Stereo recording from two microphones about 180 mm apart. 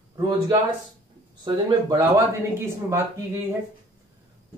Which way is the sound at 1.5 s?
25° right (ahead or behind).